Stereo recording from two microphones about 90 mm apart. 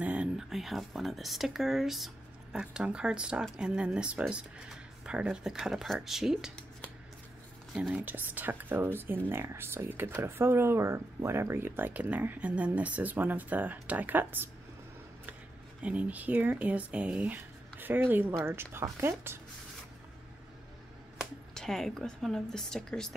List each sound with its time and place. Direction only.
0.0 s speech: 15° right (ahead or behind)
7.7 s speech: centre (ahead or behind)
8.0 s speech: 20° right (ahead or behind)
15.8 s speech: 15° right (ahead or behind)
21.5 s speech: 5° left (ahead or behind)